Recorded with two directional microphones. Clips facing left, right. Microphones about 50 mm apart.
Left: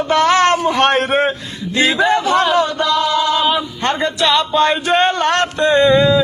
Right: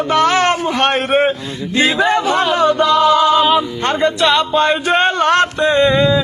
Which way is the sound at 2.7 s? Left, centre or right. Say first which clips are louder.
Right 4 dB; centre.